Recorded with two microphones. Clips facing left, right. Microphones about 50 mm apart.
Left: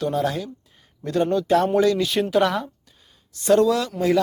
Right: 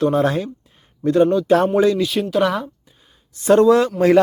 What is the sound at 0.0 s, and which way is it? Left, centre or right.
Speech, right.